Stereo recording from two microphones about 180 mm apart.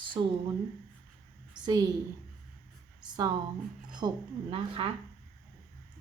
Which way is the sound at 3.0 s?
25° right (ahead or behind).